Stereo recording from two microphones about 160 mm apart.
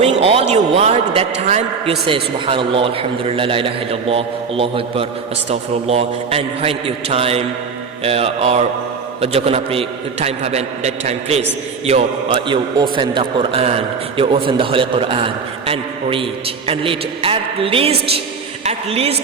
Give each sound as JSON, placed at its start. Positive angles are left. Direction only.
{"t": 0.0, "sound": "a man's voice", "side_deg": -40}